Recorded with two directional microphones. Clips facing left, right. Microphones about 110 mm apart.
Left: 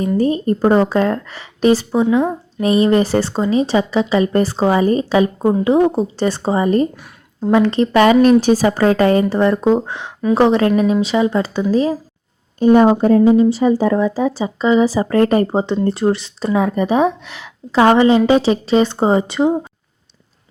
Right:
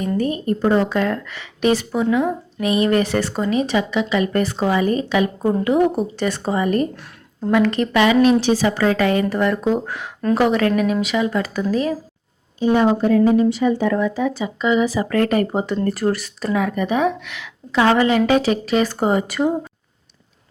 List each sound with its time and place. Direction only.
0.2 s a woman's voice: 30° left (ahead or behind)
7.9 s a woman's voice: 45° left (ahead or behind)
12.5 s speech: 45° left (ahead or behind)
13.2 s a woman's voice: 25° left (ahead or behind)
13.5 s a woman's voice: 35° left (ahead or behind)